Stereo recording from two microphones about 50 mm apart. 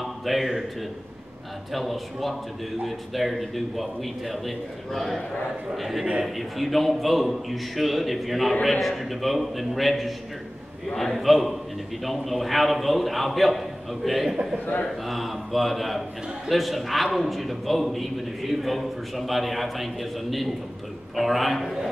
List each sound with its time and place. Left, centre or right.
0.0 s a man's voice: centre
1.7 s a man's voice: centre
14.3 s a man's voice: centre
15.0 s a man's voice: centre